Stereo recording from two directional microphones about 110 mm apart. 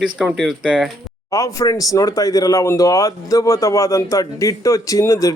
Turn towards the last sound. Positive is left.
turn(degrees=30)  # may be behind; listen again after turning